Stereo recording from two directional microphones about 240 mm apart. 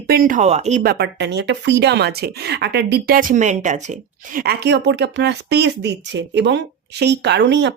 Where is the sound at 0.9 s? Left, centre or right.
Right.